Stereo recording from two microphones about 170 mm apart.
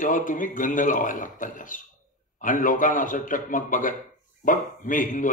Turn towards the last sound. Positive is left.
turn(degrees=50)  # may be behind; listen again after turning